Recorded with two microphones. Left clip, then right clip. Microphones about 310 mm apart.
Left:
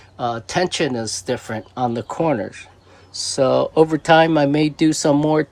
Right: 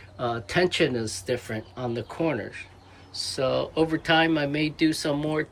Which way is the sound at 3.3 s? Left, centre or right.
Centre.